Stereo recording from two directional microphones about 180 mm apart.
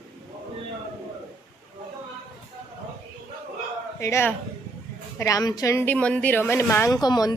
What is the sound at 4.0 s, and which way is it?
A woman's voice, 15° left (ahead or behind).